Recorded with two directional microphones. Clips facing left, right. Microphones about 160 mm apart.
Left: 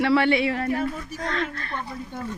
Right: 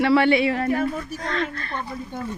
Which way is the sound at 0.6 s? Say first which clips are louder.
Right 3 dB; 55° right (ahead or behind).